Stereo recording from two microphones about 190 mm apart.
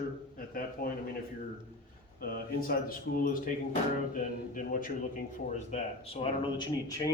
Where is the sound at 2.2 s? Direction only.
50° left (ahead or behind).